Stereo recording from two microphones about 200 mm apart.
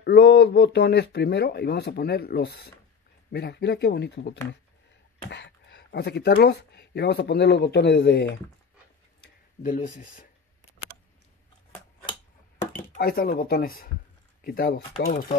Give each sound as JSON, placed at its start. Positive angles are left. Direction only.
{"t": 0.0, "sound": "speech", "side_deg": 55}
{"t": 9.6, "sound": "speech", "side_deg": 40}
{"t": 12.9, "sound": "speech", "side_deg": 50}